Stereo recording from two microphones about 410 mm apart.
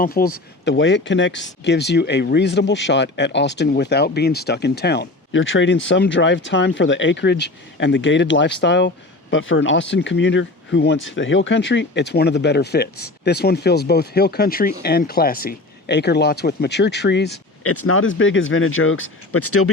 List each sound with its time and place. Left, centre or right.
0.0 s speech: left